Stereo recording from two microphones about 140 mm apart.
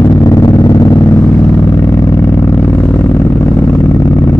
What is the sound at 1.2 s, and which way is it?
Vehicle, 10° left (ahead or behind).